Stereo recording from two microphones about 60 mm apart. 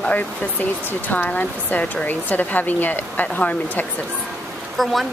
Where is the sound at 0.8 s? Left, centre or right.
Left.